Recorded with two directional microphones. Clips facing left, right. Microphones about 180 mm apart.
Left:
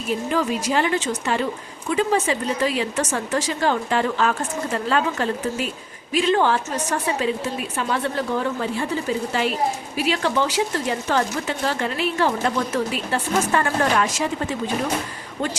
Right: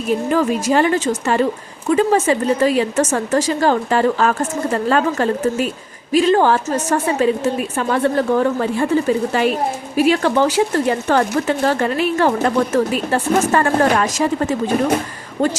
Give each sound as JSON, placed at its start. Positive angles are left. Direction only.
{"t": 0.3, "sound": "speech", "side_deg": -50}
{"t": 10.0, "sound": "speech", "side_deg": -50}